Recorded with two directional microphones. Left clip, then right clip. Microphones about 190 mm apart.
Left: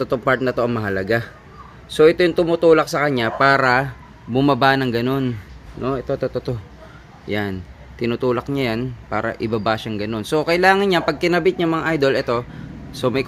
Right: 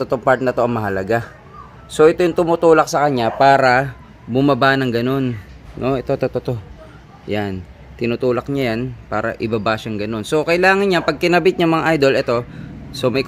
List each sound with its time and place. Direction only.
0.1 s a man's voice: 10° left (ahead or behind)
5.8 s a man's voice: 15° right (ahead or behind)
7.2 s a man's voice: centre (ahead or behind)